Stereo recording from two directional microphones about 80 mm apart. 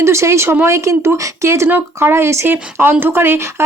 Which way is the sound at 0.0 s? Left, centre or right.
Right.